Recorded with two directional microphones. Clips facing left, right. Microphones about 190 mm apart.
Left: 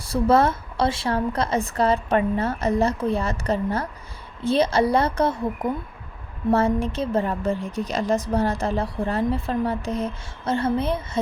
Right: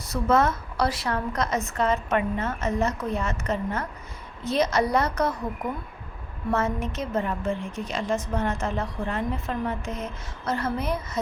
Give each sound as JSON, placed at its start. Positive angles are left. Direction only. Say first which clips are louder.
{"t": 0.0, "sound": "a woman's voice", "louder": "left 4 dB", "side_deg": 30}
{"t": 6.5, "sound": "a woman's voice", "louder": "left 6 dB", "side_deg": 30}